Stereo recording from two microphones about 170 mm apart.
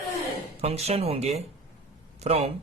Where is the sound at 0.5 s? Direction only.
35° right (ahead or behind).